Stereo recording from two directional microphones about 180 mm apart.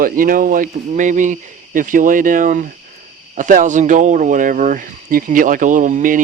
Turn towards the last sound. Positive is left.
turn(degrees=-45)  # may be behind; listen again after turning